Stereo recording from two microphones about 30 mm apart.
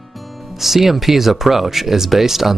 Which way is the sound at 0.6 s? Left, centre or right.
Centre.